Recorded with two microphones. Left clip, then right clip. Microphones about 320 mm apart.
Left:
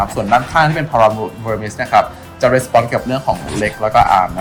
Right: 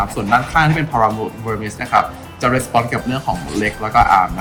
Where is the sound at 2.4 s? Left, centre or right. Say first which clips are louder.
Left 4 dB; left.